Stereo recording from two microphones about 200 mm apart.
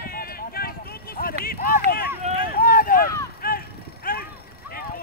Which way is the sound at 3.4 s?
50° left (ahead or behind).